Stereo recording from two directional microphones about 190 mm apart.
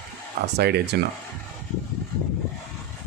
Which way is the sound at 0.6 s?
60° right (ahead or behind).